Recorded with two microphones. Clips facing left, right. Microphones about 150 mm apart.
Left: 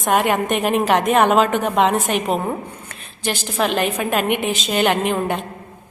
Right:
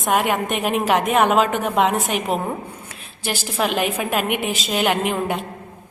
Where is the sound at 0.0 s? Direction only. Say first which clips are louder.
Left 2 dB; centre (ahead or behind).